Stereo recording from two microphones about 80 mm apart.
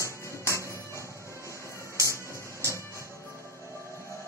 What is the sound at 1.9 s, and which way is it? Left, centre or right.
Music, right.